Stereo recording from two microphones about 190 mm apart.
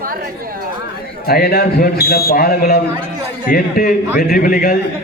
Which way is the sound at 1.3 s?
50° left (ahead or behind).